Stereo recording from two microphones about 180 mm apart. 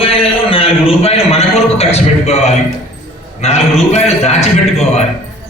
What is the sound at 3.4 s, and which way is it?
A man's voice, 35° left (ahead or behind).